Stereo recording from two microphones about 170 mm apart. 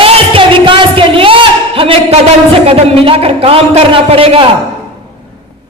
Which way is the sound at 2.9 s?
35° right (ahead or behind).